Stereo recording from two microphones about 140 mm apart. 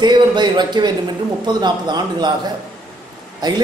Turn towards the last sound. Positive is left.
turn(degrees=-30)  # may be behind; listen again after turning